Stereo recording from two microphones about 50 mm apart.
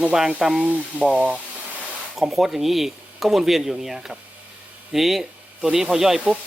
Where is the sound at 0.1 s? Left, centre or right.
Centre.